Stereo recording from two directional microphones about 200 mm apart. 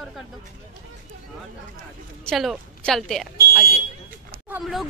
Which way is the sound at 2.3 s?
Centre (ahead or behind).